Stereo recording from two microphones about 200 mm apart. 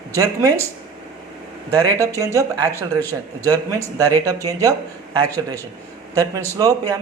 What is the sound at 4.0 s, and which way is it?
Speech, 15° right (ahead or behind).